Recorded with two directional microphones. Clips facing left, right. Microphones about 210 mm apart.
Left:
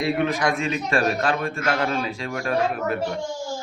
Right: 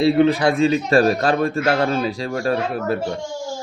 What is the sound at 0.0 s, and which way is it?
A man's voice, 30° right (ahead or behind).